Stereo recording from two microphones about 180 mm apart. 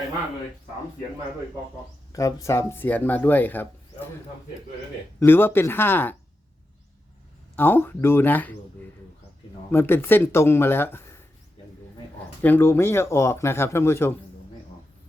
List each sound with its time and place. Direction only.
2.1 s speech: 15° left (ahead or behind)
5.2 s speech: 10° left (ahead or behind)
7.5 s speech: 10° left (ahead or behind)
9.7 s speech: 10° left (ahead or behind)
12.4 s speech: 10° left (ahead or behind)